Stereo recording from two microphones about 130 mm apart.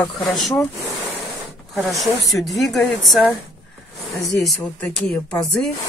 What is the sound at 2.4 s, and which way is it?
Speech, centre (ahead or behind).